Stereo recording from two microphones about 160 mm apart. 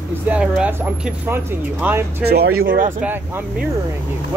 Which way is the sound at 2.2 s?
85° right.